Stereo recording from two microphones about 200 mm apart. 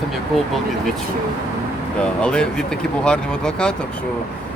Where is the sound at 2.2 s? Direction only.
5° left (ahead or behind).